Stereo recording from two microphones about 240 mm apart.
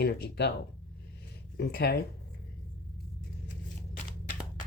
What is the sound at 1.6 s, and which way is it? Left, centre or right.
Speech, left.